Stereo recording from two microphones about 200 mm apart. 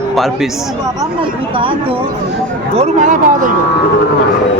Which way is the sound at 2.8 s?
40° right (ahead or behind).